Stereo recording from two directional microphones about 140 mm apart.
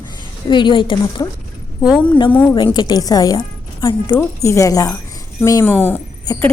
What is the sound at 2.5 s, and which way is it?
A woman's voice, 30° left (ahead or behind).